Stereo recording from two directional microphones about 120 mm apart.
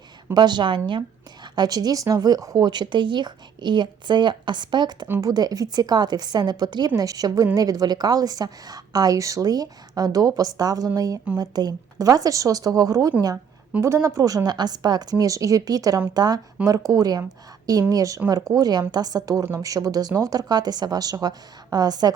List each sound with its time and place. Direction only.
0.3 s a woman's voice: 35° right (ahead or behind)